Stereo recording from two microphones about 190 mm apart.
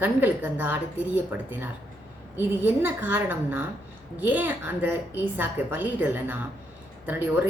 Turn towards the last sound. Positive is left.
turn(degrees=-10)  # may be behind; listen again after turning